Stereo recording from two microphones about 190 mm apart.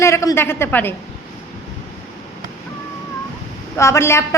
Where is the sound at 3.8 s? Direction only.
15° left (ahead or behind).